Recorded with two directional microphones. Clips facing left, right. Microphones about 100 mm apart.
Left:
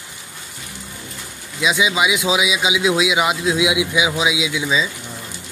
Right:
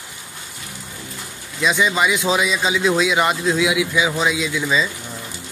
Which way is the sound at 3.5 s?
15° left (ahead or behind).